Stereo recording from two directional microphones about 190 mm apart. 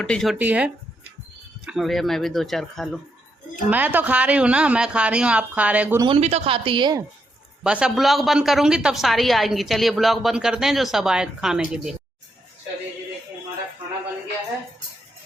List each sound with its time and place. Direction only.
0.0 s a woman's voice: 5° left (ahead or behind)
0.3 s a woman's voice: 10° right (ahead or behind)
3.7 s a woman's voice: 10° right (ahead or behind)
6.0 s speech: 30° right (ahead or behind)
7.6 s a woman's voice: 5° right (ahead or behind)